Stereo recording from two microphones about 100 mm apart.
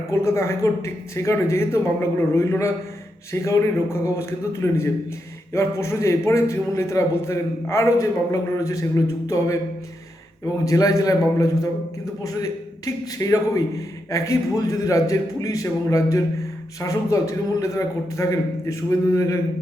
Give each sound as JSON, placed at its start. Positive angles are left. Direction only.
{"t": 0.1, "sound": "a man's voice", "side_deg": 30}
{"t": 10.7, "sound": "a man's voice", "side_deg": 35}